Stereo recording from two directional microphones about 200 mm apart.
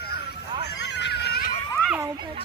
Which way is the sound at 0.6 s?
60° left (ahead or behind).